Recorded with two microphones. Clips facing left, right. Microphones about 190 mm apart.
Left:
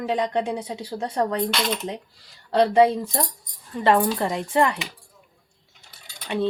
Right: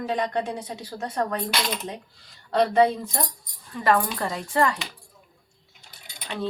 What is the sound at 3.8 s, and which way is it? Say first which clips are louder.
Speech: left 3 dB; 25° left (ahead or behind).